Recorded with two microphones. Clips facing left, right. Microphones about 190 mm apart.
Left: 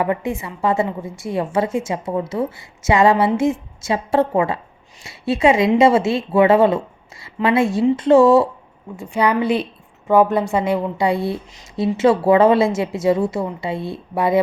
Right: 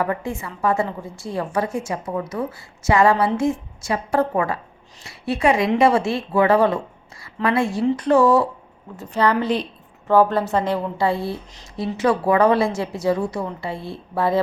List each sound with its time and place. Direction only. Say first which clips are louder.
0.0 s a woman's voice: left 3 dB; 20° left (ahead or behind)
9.0 s a woman's voice: left 2 dB; 10° left (ahead or behind)